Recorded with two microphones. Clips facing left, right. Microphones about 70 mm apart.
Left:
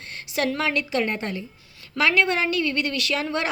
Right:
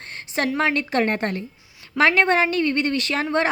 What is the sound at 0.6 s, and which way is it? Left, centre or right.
Speech, right.